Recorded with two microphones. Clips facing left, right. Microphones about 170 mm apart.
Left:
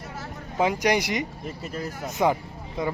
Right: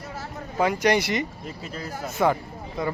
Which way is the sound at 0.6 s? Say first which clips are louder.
Right 1 dB; 15° left (ahead or behind).